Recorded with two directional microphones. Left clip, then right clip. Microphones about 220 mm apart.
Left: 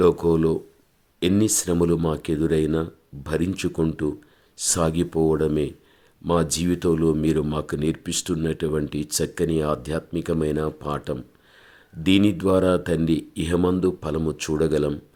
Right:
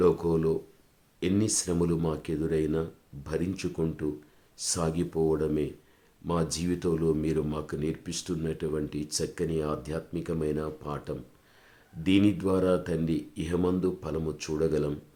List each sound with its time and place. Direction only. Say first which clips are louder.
0.0 s speech: left 6 dB; 30° left (ahead or behind)